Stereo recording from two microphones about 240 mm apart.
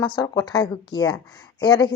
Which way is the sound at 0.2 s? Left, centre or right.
Centre.